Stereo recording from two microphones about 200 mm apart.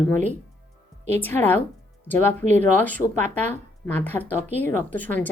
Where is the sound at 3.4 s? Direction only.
10° left (ahead or behind).